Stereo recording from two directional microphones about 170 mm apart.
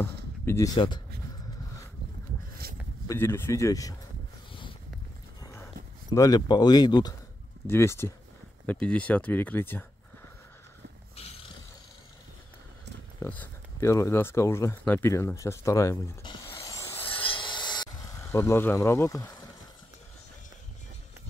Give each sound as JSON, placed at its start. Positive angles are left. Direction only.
{"t": 0.0, "sound": "a sound", "side_deg": 15}
{"t": 2.6, "sound": "a sound", "side_deg": -60}
{"t": 3.1, "sound": "speech", "side_deg": 15}
{"t": 5.4, "sound": "horse", "side_deg": 15}
{"t": 6.0, "sound": "speech", "side_deg": 20}
{"t": 13.2, "sound": "speech", "side_deg": 10}
{"t": 16.5, "sound": "helicopter", "side_deg": 15}
{"t": 17.1, "sound": "rub", "side_deg": 30}